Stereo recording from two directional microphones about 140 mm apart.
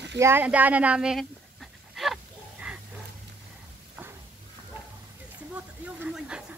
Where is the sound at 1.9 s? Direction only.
Centre (ahead or behind).